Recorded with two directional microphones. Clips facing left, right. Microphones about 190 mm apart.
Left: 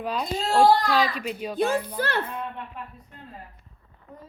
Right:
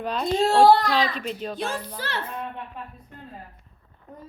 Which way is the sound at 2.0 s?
55° left (ahead or behind).